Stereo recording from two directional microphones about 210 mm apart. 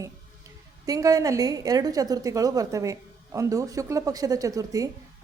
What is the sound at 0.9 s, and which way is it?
A woman's voice, 15° right (ahead or behind).